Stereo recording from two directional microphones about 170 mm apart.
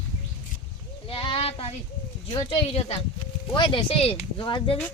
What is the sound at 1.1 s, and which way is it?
Speech, 30° left (ahead or behind).